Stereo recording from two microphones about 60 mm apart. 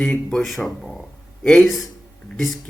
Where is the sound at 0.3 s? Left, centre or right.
Centre.